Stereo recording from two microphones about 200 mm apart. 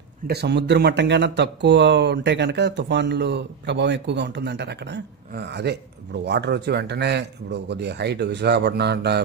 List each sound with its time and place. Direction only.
0.3 s speech: 55° right (ahead or behind)